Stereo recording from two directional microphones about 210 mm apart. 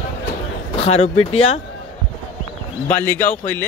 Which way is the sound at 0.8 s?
30° left (ahead or behind).